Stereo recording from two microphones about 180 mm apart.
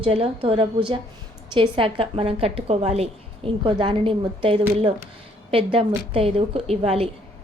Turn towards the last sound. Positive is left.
turn(degrees=-35)  # may be behind; listen again after turning